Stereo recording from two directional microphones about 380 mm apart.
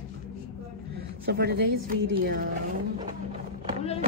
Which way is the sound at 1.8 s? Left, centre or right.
Right.